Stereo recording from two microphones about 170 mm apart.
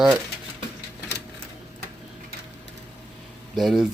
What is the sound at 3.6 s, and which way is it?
Speech, centre (ahead or behind).